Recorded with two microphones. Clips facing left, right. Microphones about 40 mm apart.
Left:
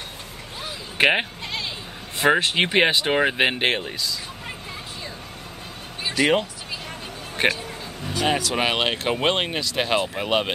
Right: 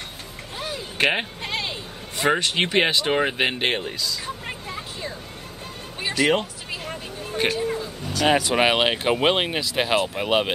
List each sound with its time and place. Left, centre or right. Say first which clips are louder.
1.0 s speech: left 3 dB; left
1.4 s a sound: right 2 dB; right
2.1 s speech: left 2 dB; left
6.1 s speech: left 1 dB; centre
7.5 s a sound: right 9 dB; right
8.3 s speech: right 4 dB; centre